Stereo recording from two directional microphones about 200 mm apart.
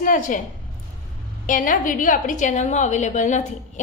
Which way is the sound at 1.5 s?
40° left (ahead or behind).